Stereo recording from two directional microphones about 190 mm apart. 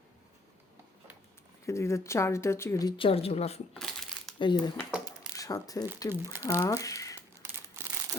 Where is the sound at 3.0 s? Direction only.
30° left (ahead or behind).